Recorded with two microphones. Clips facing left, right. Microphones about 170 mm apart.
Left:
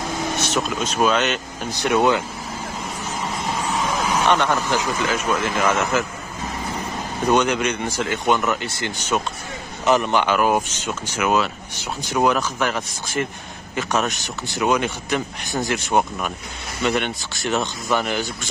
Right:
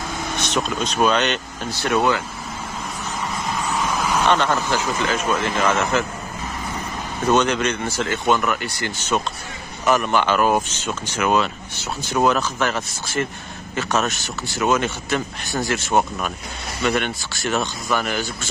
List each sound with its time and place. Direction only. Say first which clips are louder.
0.4 s speech: right 4 dB; 5° left (ahead or behind)
1.7 s speech: left 2 dB; 15° left (ahead or behind)
3.8 s speech: even; 10° left (ahead or behind)
7.2 s speech: even; 10° left (ahead or behind)